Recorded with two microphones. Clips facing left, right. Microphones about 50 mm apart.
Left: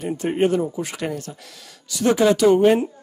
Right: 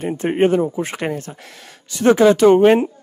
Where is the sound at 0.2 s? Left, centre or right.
Right.